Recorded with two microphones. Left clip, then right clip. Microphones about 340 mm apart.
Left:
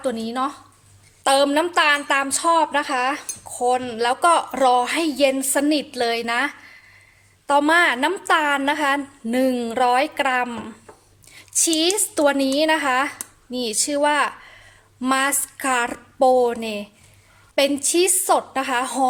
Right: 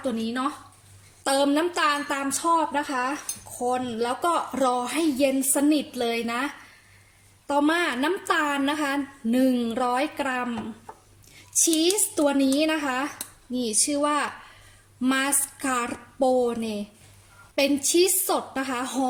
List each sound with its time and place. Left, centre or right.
0.2 s a woman's voice: centre
11.5 s a woman's voice: left